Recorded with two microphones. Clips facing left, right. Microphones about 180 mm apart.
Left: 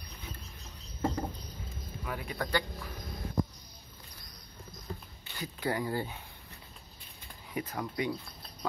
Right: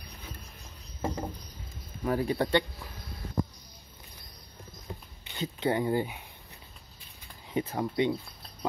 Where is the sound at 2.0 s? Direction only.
35° right (ahead or behind).